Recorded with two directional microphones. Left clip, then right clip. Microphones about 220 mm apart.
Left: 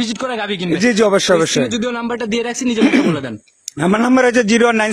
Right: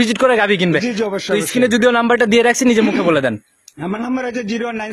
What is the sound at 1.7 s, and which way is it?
A man's voice, 40° right (ahead or behind).